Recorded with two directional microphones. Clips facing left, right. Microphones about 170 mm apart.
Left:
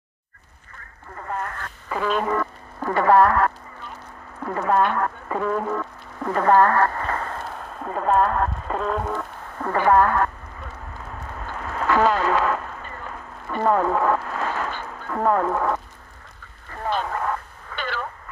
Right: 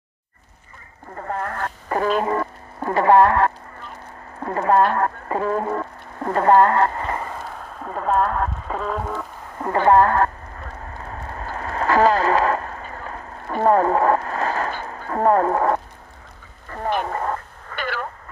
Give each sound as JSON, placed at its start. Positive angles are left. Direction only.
{"t": 1.2, "sound": "radio", "side_deg": -50}
{"t": 2.2, "sound": "speech", "side_deg": -25}
{"t": 4.4, "sound": "speech", "side_deg": -35}
{"t": 7.2, "sound": "speech", "side_deg": -5}
{"t": 9.6, "sound": "speech", "side_deg": -20}
{"t": 11.4, "sound": "a sound", "side_deg": -40}
{"t": 14.9, "sound": "speech", "side_deg": -35}
{"t": 17.7, "sound": "radio", "side_deg": -10}